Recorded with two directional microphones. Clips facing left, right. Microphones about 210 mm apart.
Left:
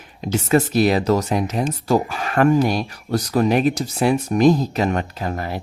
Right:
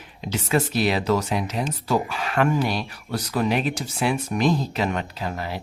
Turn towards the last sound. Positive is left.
turn(degrees=50)  # may be behind; listen again after turning